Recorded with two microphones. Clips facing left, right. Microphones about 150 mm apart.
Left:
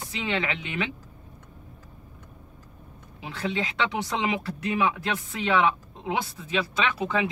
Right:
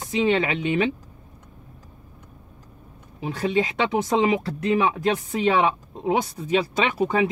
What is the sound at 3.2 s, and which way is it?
Speech, 45° right (ahead or behind).